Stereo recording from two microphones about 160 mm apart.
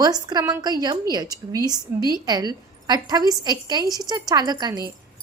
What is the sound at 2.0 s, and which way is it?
Speech, 25° left (ahead or behind).